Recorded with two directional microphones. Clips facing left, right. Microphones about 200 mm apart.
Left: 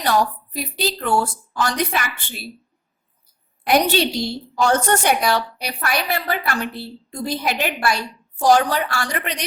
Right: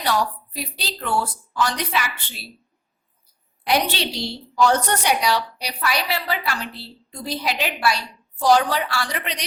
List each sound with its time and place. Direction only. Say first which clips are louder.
0.0 s a woman's voice: left 3 dB; 45° left (ahead or behind)
3.6 s a woman's voice: left 5 dB; 50° left (ahead or behind)